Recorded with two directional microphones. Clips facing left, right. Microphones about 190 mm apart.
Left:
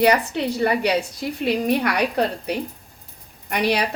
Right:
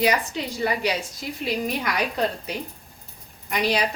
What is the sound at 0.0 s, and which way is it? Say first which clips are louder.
A woman's voice: left 5 dB; 65° left (ahead or behind).